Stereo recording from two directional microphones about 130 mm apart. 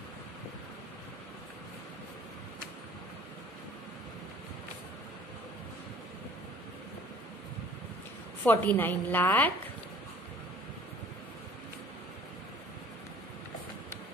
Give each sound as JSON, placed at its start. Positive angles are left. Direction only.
{"t": 8.5, "sound": "a woman's voice", "side_deg": 15}